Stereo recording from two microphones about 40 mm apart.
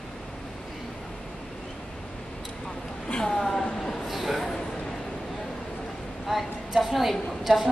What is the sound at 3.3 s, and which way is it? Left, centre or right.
Speech, centre.